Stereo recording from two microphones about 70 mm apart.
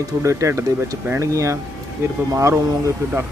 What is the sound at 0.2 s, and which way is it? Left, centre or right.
A man's voice, right.